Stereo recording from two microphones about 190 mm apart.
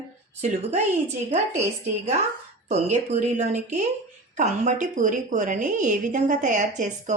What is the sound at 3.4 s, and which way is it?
A woman's voice, 40° right (ahead or behind).